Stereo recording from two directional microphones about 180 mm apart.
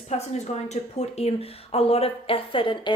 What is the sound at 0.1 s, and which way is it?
A woman's voice, 35° left (ahead or behind).